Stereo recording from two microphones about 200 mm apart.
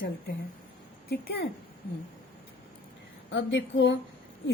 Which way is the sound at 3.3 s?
65° left (ahead or behind).